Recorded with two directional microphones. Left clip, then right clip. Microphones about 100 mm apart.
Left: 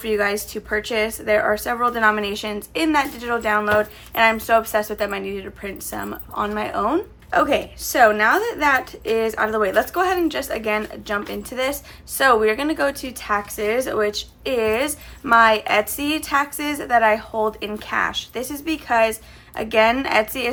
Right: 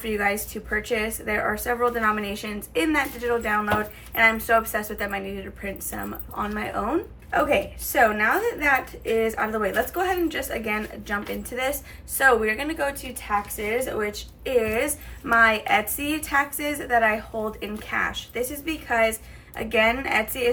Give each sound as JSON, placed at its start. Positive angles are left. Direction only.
{"t": 0.0, "sound": "a woman's voice", "side_deg": 40}
{"t": 1.2, "sound": "a woman's voice", "side_deg": 35}
{"t": 14.4, "sound": "a woman's voice", "side_deg": 45}